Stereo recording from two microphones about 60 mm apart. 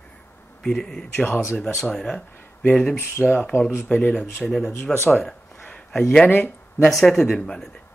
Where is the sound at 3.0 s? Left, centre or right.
Left.